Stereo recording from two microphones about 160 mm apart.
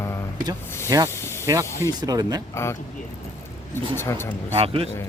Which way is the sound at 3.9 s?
15° left (ahead or behind).